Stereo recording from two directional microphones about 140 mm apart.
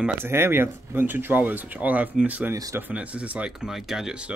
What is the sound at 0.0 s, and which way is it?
Speech, 15° right (ahead or behind).